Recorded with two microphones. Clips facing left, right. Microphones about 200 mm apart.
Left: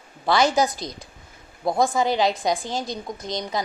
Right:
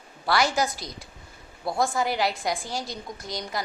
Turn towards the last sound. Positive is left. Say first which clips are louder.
# left 5 dB
turn(degrees=20)  # may be behind; listen again after turning